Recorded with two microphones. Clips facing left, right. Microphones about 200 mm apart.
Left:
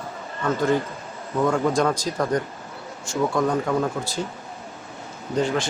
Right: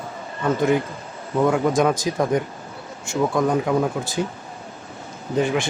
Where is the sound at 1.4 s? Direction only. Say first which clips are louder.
Right 2 dB; 5° right (ahead or behind).